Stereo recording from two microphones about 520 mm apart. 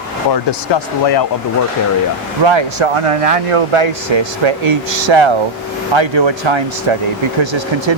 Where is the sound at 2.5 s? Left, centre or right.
Right.